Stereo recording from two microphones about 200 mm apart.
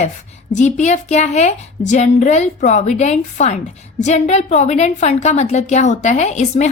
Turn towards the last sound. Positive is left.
turn(degrees=35)  # may be behind; listen again after turning